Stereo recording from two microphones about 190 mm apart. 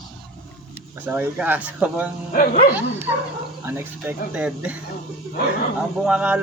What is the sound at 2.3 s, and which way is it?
Speech, 50° left (ahead or behind).